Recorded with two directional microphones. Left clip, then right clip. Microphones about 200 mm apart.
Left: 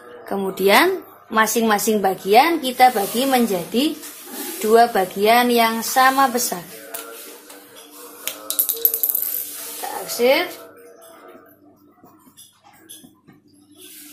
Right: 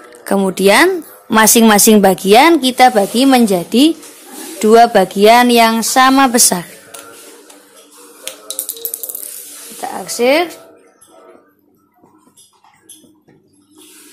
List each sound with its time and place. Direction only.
0.2 s speech: 40° right (ahead or behind)
1.3 s speech: 50° right (ahead or behind)
9.8 s a sound: 50° right (ahead or behind)